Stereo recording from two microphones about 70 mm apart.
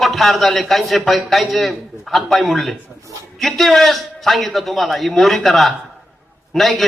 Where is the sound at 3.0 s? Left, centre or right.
Right.